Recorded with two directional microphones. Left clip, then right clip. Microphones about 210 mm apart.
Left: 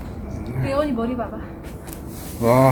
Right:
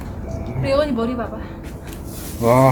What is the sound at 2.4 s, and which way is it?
Speech, 5° left (ahead or behind).